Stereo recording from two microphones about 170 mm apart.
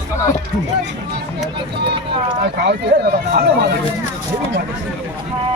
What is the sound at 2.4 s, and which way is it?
Speech, 75° right (ahead or behind).